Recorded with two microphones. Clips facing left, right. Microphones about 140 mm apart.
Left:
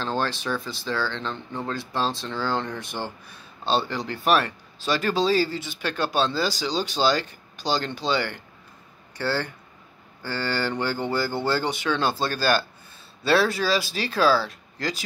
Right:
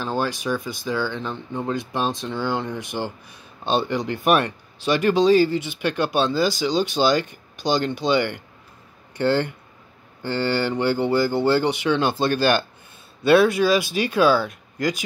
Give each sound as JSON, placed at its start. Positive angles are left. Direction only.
{"t": 0.0, "sound": "speech", "side_deg": -10}
{"t": 13.8, "sound": "speech", "side_deg": 35}
{"t": 14.1, "sound": "speech", "side_deg": -15}